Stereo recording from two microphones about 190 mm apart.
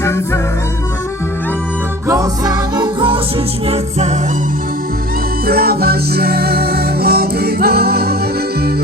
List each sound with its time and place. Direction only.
2.0 s music: 15° right (ahead or behind); by 4.2 s 35° right (ahead or behind)
5.5 s music: 55° right (ahead or behind)